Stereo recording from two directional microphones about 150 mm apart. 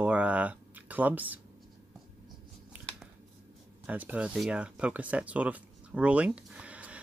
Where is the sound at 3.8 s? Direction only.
10° right (ahead or behind).